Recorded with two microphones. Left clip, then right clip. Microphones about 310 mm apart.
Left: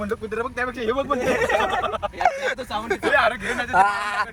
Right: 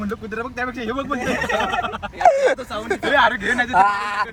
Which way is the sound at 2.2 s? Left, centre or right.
Centre.